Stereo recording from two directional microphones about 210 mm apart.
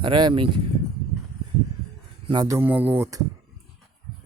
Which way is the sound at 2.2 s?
20° right (ahead or behind).